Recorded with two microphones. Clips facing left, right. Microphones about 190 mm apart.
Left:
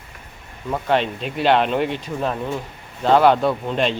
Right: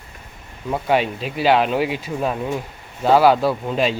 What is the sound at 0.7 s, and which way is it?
Speech, 10° right (ahead or behind).